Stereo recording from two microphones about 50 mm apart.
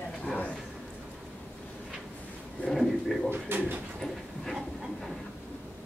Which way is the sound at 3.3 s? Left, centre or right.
Right.